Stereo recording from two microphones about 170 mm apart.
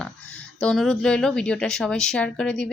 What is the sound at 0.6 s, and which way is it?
Speech, 5° left (ahead or behind).